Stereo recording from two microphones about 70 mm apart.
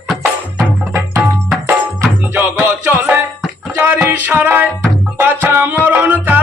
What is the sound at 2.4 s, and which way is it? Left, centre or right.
Music, right.